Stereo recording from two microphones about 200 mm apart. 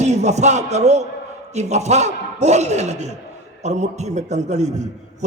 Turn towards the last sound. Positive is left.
turn(degrees=-35)  # may be behind; listen again after turning